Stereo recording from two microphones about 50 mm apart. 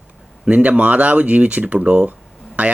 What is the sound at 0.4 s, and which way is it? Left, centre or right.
Speech, right.